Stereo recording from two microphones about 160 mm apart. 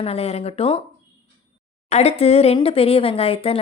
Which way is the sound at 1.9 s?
40° left (ahead or behind).